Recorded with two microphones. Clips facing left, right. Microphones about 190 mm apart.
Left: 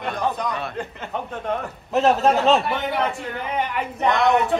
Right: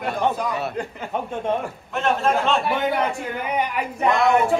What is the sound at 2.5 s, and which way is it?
Speech, centre (ahead or behind).